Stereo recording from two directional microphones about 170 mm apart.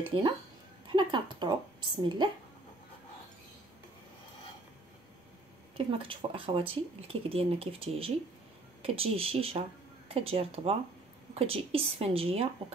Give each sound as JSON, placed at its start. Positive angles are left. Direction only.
{"t": 0.1, "sound": "a woman's voice", "side_deg": -35}
{"t": 5.8, "sound": "speech", "side_deg": -30}